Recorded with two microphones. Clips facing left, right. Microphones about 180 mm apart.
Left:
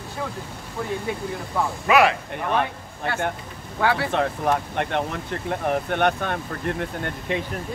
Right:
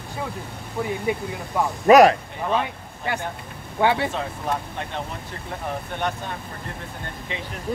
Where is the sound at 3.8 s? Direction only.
20° right (ahead or behind).